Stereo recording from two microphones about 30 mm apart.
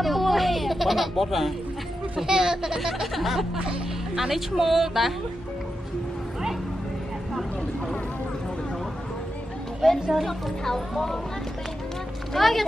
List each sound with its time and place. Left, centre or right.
0.0 s music: centre
2.2 s a woman's voice: centre
9.8 s a woman's voice: centre
10.6 s speech: centre
12.4 s a woman's voice: centre